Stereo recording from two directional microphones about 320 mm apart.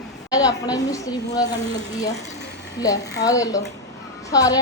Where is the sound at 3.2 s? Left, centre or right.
Centre.